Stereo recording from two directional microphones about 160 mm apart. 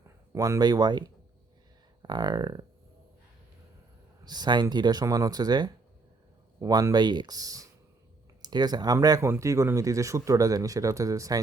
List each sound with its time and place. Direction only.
0.3 s speech: 20° right (ahead or behind)
4.2 s speech: 25° right (ahead or behind)